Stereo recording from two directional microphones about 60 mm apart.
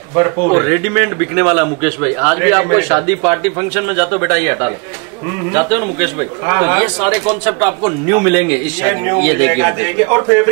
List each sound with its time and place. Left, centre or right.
0.1 s a man's voice: right